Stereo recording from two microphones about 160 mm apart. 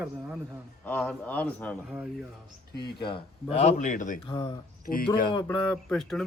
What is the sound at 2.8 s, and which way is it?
A man's voice, 30° left (ahead or behind).